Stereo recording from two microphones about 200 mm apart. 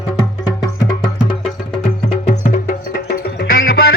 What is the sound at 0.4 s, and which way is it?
Music, 20° left (ahead or behind).